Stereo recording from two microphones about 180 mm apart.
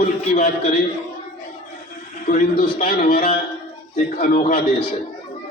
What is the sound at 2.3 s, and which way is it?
A man's voice, 50° left (ahead or behind).